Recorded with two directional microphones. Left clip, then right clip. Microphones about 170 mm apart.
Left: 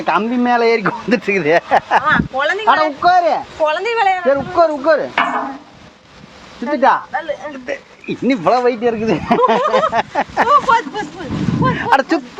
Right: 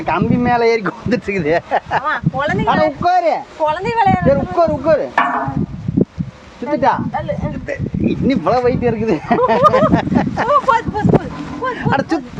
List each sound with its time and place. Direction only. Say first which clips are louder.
0.0 s speech: left 1 dB; 10° left (ahead or behind)
2.0 s speech: left 3 dB; 25° right (ahead or behind)
2.6 s speech: left 2 dB; 10° left (ahead or behind)
3.6 s speech: even; 30° right (ahead or behind)
4.3 s speech: left 1 dB; 10° left (ahead or behind)
6.7 s speech: left 2 dB; 15° left (ahead or behind)
8.5 s speech: left 1 dB; 5° left (ahead or behind); by 10.5 s 20° left (ahead or behind)
10.7 s a sound: even; 50° right (ahead or behind)
11.7 s speech: left 3 dB; 35° left (ahead or behind)